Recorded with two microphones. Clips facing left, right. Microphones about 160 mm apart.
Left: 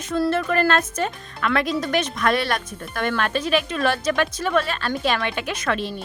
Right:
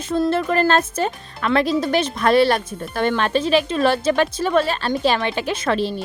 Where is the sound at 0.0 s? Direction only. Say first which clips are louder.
Right 2 dB; 30° right (ahead or behind).